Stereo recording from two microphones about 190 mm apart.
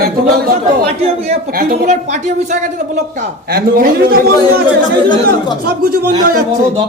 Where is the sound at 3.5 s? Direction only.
55° right (ahead or behind).